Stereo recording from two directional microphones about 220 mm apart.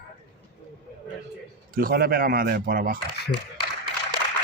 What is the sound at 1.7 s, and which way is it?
Speech, 40° right (ahead or behind).